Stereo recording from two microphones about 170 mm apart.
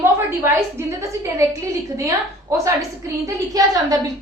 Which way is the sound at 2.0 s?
20° right (ahead or behind).